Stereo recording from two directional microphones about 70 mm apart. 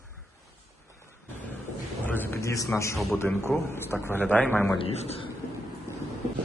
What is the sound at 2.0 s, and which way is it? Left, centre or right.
Speech, left.